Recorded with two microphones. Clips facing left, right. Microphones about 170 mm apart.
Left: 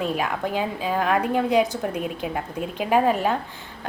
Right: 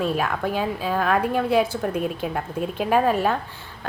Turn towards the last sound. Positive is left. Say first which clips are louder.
# even
turn(degrees=15)  # may be behind; listen again after turning